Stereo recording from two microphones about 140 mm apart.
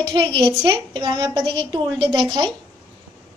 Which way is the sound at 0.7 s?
35° right (ahead or behind).